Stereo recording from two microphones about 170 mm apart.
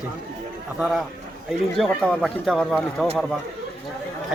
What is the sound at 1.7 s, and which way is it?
Speech, centre (ahead or behind).